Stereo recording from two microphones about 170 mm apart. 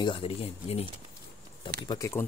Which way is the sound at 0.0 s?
30° left (ahead or behind).